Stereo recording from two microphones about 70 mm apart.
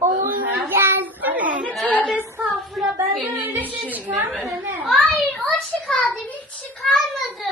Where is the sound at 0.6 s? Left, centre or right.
Right.